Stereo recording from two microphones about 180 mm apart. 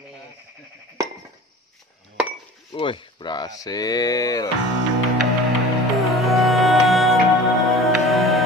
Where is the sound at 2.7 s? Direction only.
30° left (ahead or behind).